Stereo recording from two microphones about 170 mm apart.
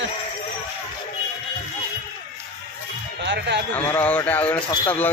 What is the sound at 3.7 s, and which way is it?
Speech, 10° left (ahead or behind).